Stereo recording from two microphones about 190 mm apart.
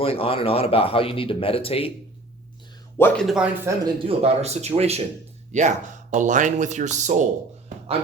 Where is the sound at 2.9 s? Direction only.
10° left (ahead or behind).